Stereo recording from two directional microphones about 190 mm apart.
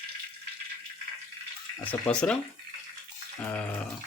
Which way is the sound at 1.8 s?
10° left (ahead or behind).